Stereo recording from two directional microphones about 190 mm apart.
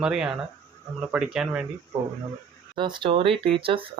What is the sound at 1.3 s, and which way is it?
Speech, 5° right (ahead or behind).